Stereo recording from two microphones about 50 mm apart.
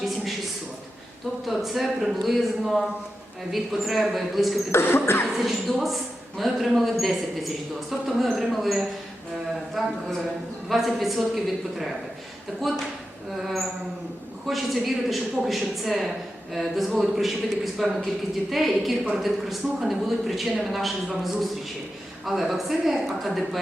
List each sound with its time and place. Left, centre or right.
1.5 s speech: centre
4.7 s music: left
5.4 s speech: centre
12.7 s speech: centre
22.3 s speech: centre